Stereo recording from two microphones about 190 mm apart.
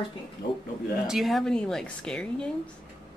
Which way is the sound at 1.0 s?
Centre (ahead or behind).